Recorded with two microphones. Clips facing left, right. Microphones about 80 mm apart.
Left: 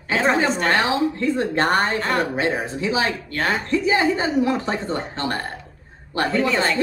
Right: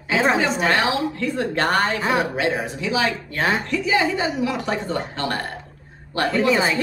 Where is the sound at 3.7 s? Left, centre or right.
Left.